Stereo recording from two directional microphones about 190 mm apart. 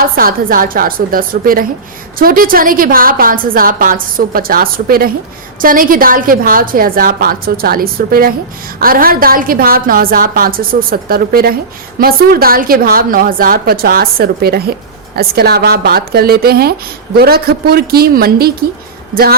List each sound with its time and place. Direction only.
0.0 s a woman's voice: 50° right (ahead or behind)